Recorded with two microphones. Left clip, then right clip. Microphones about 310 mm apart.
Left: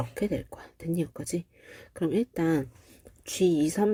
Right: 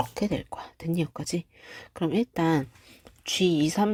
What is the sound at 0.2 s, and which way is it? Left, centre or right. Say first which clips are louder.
Speech: right 1 dB; right.